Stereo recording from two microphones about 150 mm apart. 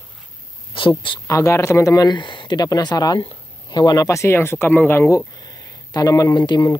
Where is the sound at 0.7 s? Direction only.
35° left (ahead or behind).